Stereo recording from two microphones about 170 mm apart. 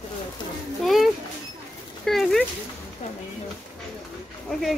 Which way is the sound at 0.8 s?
Centre (ahead or behind).